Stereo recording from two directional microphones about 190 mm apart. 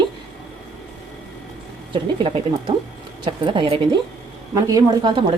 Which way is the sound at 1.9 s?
25° right (ahead or behind).